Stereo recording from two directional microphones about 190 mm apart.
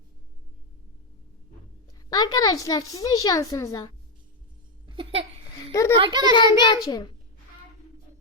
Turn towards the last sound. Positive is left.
turn(degrees=20)  # may be behind; listen again after turning